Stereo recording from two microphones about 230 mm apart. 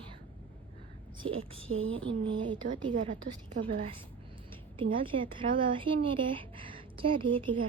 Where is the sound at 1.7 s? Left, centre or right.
Right.